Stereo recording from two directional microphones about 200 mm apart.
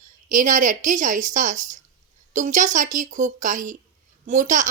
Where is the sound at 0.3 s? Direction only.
40° right (ahead or behind).